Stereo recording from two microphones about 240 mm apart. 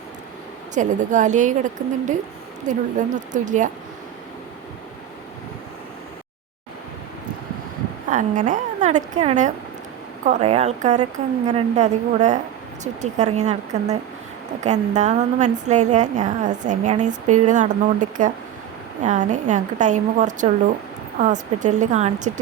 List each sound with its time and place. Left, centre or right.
0.7 s a woman's voice: right
2.6 s a woman's voice: right
8.1 s a woman's voice: right